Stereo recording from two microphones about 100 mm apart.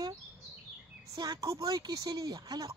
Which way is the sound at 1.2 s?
35° right (ahead or behind).